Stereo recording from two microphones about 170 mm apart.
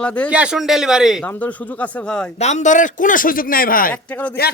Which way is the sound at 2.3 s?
40° left (ahead or behind).